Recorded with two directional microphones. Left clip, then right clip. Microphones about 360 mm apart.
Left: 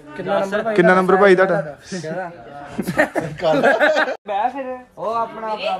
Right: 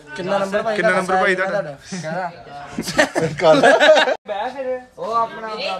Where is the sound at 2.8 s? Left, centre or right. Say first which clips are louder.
Right 2 dB; right.